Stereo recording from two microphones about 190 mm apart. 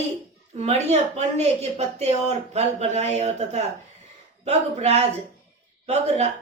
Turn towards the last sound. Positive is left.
turn(degrees=-35)  # may be behind; listen again after turning